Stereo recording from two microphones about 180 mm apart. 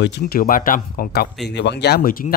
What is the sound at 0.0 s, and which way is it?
Speech, 65° left (ahead or behind).